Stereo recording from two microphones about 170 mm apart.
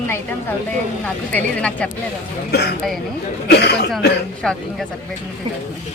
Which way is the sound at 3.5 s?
70° left (ahead or behind).